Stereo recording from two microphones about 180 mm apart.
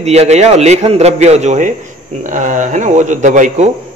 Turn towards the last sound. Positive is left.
turn(degrees=-45)  # may be behind; listen again after turning